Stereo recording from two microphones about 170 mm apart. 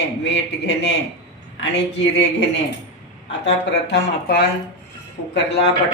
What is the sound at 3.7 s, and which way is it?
Speech, 80° left.